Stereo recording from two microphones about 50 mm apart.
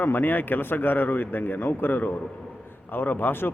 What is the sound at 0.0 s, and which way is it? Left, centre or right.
Speech, left.